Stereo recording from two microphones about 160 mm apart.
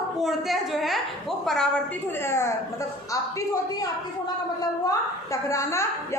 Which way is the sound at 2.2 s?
15° left (ahead or behind).